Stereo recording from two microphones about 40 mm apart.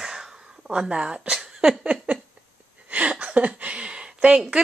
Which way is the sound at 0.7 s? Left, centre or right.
Right.